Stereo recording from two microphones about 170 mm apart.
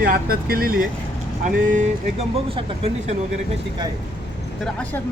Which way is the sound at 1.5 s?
45° right (ahead or behind).